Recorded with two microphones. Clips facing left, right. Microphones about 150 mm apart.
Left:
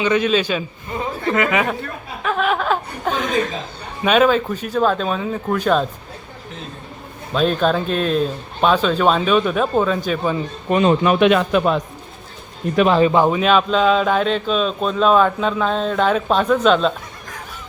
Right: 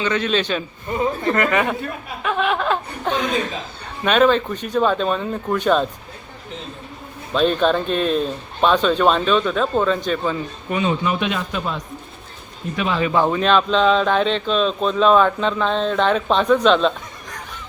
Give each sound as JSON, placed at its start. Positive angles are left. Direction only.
{"t": 0.0, "sound": "a man's voice", "side_deg": 15}
{"t": 2.2, "sound": "chuckle", "side_deg": 0}
{"t": 4.0, "sound": "speech", "side_deg": 5}
{"t": 7.3, "sound": "speech", "side_deg": 0}
{"t": 10.7, "sound": "speech", "side_deg": 45}
{"t": 11.0, "sound": "a man's voice", "side_deg": 65}
{"t": 12.7, "sound": "speech", "side_deg": 50}
{"t": 13.1, "sound": "speech", "side_deg": 15}